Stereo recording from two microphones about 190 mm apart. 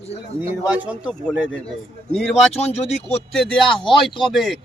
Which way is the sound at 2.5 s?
35° left (ahead or behind).